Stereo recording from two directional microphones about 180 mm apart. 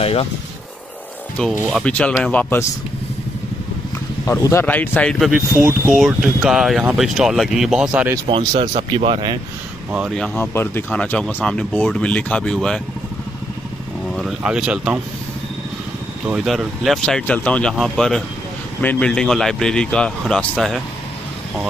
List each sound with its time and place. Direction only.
0.0 s speech: 35° left (ahead or behind)
1.7 s speech: 5° left (ahead or behind)
4.3 s speech: 15° left (ahead or behind); by 8.1 s 5° right (ahead or behind)
8.3 s speech: 30° right (ahead or behind)
10.1 s speech: 5° left (ahead or behind)
14.1 s speech: 5° right (ahead or behind)
16.3 s speech: centre (ahead or behind)